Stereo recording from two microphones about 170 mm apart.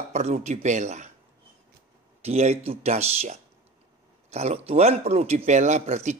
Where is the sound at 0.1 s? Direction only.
40° right (ahead or behind).